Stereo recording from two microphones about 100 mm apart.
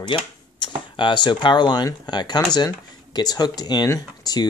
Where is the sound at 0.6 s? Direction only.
50° left (ahead or behind).